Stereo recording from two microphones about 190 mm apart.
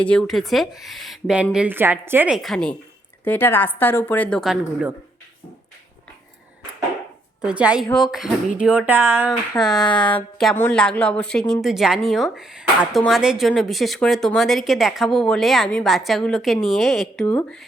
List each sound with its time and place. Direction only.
0.0 s a woman's voice: 5° left (ahead or behind)
7.4 s a woman's voice: 5° right (ahead or behind)
9.6 s speech: 20° left (ahead or behind)
10.1 s a woman's voice: 5° left (ahead or behind)